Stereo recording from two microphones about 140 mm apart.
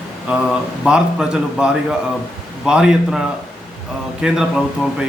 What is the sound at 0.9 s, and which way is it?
A man's voice, 5° right (ahead or behind).